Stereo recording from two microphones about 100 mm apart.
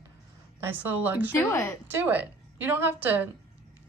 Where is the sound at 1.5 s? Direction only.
30° left (ahead or behind).